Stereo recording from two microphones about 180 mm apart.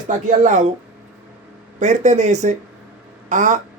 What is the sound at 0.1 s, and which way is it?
Speech, 45° right (ahead or behind).